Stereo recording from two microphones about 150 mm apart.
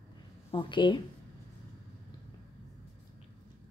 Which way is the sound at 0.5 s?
35° left (ahead or behind).